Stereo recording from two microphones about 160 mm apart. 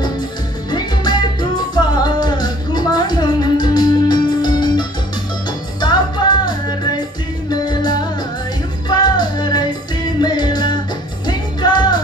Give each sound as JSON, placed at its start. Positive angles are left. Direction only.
{"t": 0.7, "sound": "music", "side_deg": 25}
{"t": 7.6, "sound": "music", "side_deg": 25}